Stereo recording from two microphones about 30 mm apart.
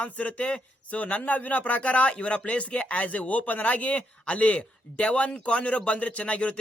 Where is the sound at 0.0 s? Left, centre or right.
Left.